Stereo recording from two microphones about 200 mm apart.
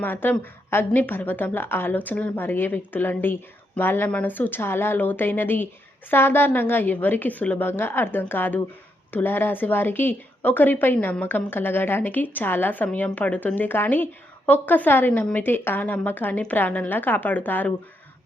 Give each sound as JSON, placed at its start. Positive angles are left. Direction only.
{"t": 0.0, "sound": "a woman's voice", "side_deg": 10}